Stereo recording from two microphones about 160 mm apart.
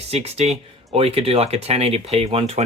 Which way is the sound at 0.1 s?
40° right (ahead or behind).